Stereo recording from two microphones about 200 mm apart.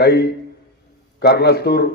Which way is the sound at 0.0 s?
55° left (ahead or behind).